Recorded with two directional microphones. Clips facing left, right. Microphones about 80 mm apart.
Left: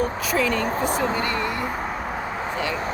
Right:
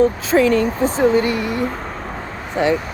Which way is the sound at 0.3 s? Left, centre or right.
Right.